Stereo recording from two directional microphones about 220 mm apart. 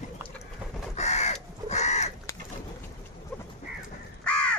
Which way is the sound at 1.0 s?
30° left (ahead or behind).